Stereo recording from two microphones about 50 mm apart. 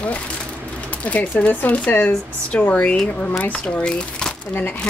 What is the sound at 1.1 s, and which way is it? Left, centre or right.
A woman's voice, left.